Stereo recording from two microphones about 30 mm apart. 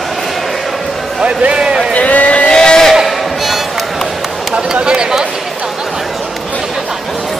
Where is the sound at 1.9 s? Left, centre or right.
Left.